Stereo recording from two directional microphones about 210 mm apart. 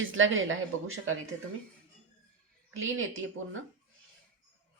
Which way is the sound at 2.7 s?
70° right (ahead or behind).